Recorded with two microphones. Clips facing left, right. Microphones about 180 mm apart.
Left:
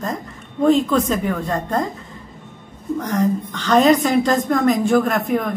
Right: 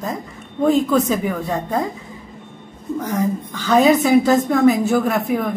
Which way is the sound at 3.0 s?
5° right (ahead or behind).